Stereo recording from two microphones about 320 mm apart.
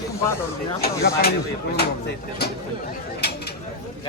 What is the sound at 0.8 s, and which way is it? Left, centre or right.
Speech, left.